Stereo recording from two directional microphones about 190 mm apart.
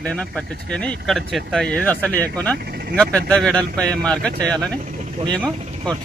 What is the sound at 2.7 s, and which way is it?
Vehicle, 55° right (ahead or behind).